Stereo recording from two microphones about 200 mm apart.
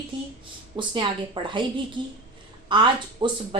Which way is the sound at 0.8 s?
20° right (ahead or behind).